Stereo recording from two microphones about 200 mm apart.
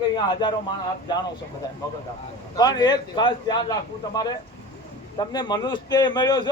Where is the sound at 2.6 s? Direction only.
20° left (ahead or behind).